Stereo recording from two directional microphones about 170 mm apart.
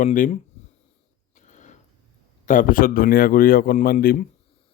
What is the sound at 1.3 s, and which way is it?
Mechanisms, 45° left (ahead or behind).